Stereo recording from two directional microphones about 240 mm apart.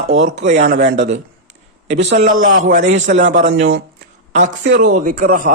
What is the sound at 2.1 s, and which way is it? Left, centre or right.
A man's voice, right.